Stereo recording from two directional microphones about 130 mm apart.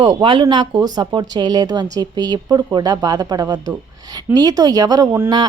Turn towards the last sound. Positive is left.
turn(degrees=-25)  # may be behind; listen again after turning